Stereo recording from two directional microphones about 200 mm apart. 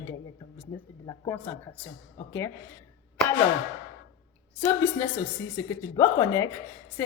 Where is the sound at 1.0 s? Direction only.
20° left (ahead or behind).